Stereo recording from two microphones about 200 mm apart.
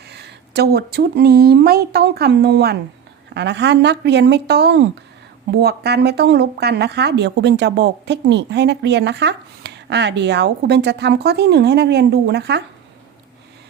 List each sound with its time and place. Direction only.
0.1 s speech: 55° right (ahead or behind)